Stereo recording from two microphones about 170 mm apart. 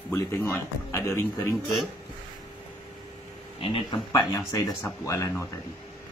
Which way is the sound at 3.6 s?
30° left (ahead or behind).